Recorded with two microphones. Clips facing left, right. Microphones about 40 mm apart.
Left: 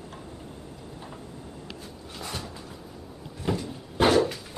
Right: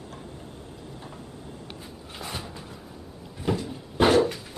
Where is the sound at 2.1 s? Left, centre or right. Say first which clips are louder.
Right 1 dB; centre.